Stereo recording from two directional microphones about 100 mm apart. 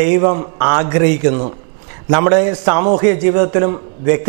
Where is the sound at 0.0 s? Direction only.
15° right (ahead or behind).